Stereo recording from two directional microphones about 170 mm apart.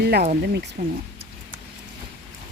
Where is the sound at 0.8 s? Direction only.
55° right (ahead or behind).